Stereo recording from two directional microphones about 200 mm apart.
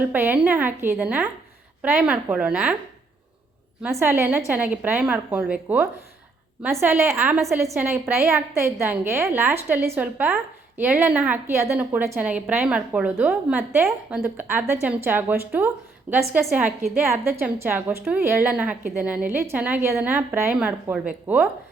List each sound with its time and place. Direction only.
0.0 s a woman's voice: 10° right (ahead or behind)
3.8 s a woman's voice: 10° right (ahead or behind)